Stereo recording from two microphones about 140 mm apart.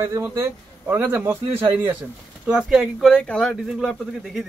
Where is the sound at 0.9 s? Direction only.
10° right (ahead or behind).